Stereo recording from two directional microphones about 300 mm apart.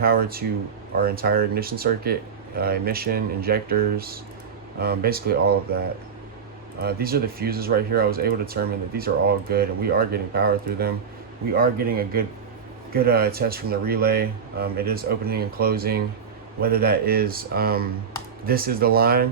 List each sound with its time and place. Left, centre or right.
0.0 s speech: right
6.8 s speech: right